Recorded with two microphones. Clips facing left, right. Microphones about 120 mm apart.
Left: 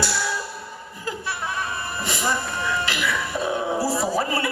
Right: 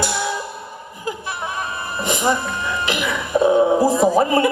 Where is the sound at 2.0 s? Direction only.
20° right (ahead or behind).